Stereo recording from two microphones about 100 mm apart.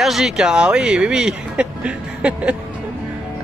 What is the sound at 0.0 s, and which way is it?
Speech, 5° right (ahead or behind).